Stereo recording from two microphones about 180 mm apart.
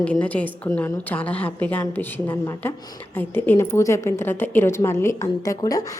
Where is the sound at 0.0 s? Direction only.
10° left (ahead or behind).